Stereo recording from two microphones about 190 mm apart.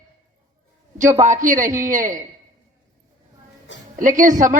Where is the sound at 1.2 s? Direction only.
40° right (ahead or behind).